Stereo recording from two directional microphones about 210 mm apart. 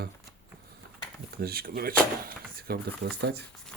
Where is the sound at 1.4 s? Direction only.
45° right (ahead or behind).